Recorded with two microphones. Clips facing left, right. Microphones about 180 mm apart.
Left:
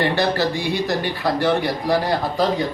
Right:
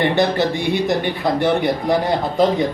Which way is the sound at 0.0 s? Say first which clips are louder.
Right 3 dB; 20° right (ahead or behind).